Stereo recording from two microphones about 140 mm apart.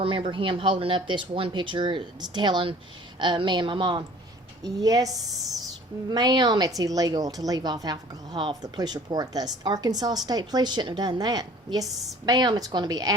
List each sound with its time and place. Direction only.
0.0 s a woman's voice: 35° right (ahead or behind)